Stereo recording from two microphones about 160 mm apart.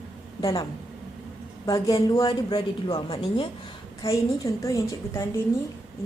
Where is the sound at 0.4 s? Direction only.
20° left (ahead or behind).